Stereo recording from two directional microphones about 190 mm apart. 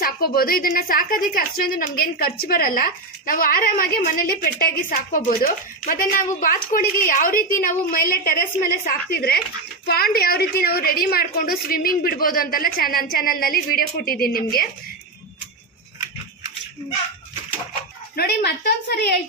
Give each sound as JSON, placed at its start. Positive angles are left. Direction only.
{"t": 0.0, "sound": "a woman's voice", "side_deg": 50}
{"t": 18.1, "sound": "a woman's voice", "side_deg": 60}